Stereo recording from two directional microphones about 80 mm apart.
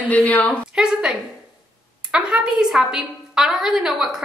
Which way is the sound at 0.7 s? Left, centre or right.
Centre.